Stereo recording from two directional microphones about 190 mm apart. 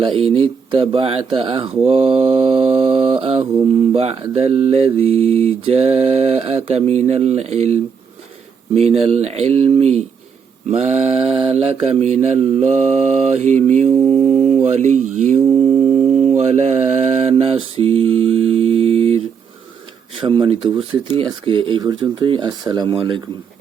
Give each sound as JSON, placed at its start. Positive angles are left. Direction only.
{"t": 0.0, "sound": "speech", "side_deg": -30}
{"t": 1.9, "sound": "mantra", "side_deg": -30}
{"t": 16.4, "sound": "mantra", "side_deg": -35}
{"t": 20.2, "sound": "speech", "side_deg": -30}